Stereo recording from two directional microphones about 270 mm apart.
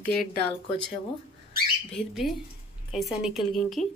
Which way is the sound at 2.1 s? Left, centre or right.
Centre.